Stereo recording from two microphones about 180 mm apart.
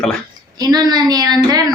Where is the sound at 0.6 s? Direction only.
20° right (ahead or behind).